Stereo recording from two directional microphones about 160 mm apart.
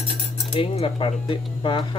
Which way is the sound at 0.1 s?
35° left (ahead or behind).